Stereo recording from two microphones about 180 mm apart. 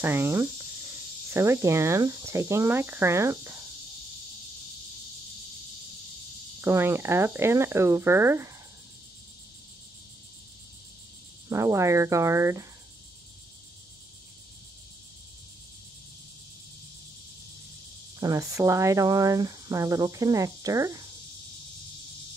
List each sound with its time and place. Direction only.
0.0 s speech: 15° right (ahead or behind)
6.6 s speech: 15° right (ahead or behind)
11.4 s speech: 20° right (ahead or behind)
18.2 s speech: 20° right (ahead or behind)